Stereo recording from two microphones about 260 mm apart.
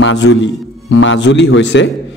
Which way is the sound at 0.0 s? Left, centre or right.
Left.